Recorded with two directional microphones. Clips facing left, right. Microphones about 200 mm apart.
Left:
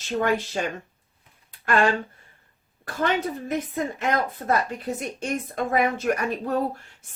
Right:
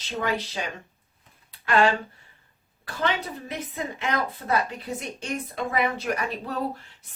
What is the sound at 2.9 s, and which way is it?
Speech, 45° left (ahead or behind).